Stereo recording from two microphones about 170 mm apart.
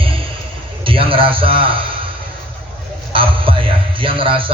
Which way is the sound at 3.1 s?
30° right (ahead or behind).